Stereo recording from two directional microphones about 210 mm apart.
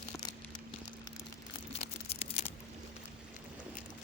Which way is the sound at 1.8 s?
30° left (ahead or behind).